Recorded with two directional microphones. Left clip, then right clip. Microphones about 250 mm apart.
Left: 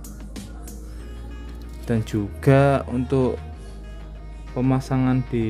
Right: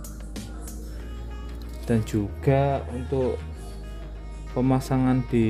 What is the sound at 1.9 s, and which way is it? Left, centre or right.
Speech, centre.